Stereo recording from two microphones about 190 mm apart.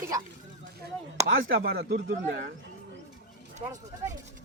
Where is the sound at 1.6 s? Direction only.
55° right (ahead or behind).